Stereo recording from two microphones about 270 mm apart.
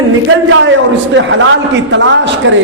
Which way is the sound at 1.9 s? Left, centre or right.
Right.